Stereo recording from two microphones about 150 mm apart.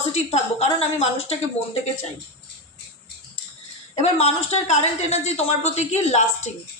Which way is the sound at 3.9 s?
45° left (ahead or behind).